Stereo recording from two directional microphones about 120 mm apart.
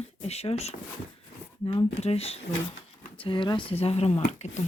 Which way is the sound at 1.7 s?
60° left (ahead or behind).